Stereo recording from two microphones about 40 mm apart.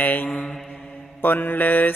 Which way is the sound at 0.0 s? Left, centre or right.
Left.